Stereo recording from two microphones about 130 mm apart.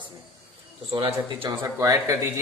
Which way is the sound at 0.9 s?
40° right (ahead or behind).